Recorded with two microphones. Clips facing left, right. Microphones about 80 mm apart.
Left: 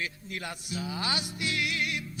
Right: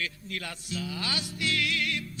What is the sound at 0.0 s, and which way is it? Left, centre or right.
Speech, left.